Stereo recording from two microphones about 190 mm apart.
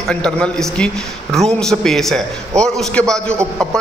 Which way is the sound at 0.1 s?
5° left (ahead or behind).